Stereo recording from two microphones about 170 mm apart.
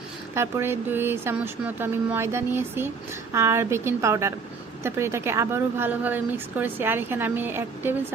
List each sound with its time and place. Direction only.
0.3 s a woman's voice: 15° right (ahead or behind)